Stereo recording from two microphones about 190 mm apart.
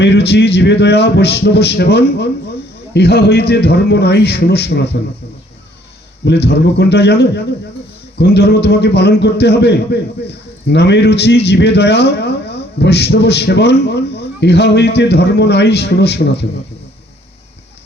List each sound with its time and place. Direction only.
0.0 s a man's voice: 65° left (ahead or behind)
6.2 s a man's voice: 60° left (ahead or behind)